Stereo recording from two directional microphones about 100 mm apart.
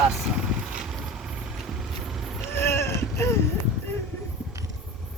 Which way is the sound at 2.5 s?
25° left (ahead or behind).